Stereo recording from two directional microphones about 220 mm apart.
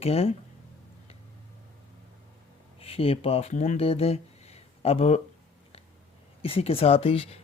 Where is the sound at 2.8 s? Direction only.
25° left (ahead or behind).